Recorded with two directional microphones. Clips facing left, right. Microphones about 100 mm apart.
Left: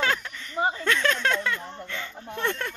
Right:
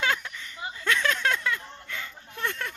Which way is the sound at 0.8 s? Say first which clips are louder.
Right 3 dB; 5° right (ahead or behind).